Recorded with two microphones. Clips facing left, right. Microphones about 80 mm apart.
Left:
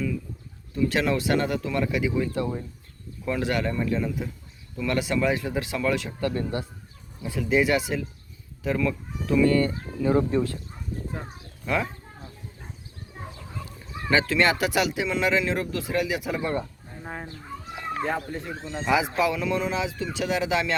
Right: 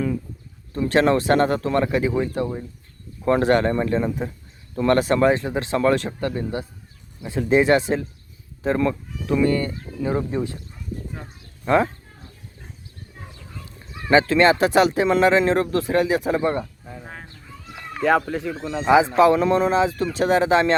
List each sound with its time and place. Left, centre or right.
0.8 s speech: right
3.2 s speech: right
5.4 s speech: right
5.7 s speech: right
6.3 s speech: centre
7.3 s speech: right; by 10.5 s centre
11.6 s speech: right
14.1 s speech: right
18.0 s speech: right
19.1 s speech: right